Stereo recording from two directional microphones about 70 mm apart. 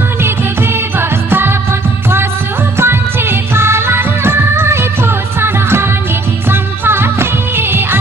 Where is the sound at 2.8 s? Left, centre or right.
Right.